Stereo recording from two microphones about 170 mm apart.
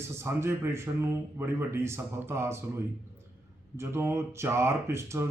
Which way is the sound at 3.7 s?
15° right (ahead or behind).